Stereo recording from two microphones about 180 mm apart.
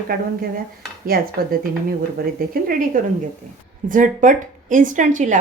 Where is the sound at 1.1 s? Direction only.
55° right (ahead or behind).